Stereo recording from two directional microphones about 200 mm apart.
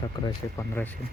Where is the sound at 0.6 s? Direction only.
10° left (ahead or behind).